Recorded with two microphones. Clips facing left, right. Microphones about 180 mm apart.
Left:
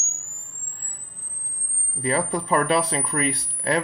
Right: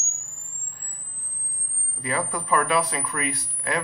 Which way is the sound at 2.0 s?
30° left (ahead or behind).